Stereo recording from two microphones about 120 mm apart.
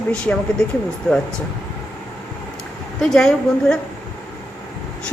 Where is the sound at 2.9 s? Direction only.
5° left (ahead or behind).